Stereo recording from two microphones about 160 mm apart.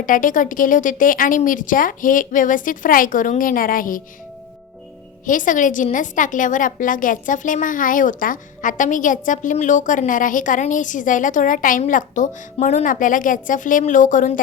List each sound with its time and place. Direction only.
0.0 s a woman's voice: 55° left (ahead or behind)
5.2 s a woman's voice: 55° left (ahead or behind)